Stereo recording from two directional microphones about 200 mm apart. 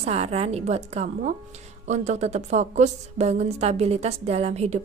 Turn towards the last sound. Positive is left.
turn(degrees=-35)  # may be behind; listen again after turning